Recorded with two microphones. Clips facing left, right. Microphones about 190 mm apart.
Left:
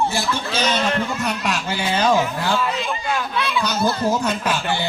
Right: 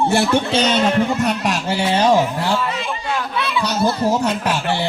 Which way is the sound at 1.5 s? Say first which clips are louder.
Right 4 dB; 35° right (ahead or behind).